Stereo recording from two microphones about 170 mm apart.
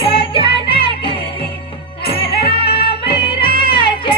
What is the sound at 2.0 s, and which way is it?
Music, 65° left (ahead or behind).